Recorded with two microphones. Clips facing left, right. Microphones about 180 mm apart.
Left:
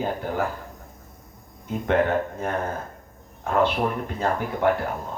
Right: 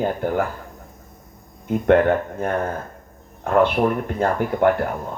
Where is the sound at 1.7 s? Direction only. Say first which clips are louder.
Right 6 dB; 55° right (ahead or behind).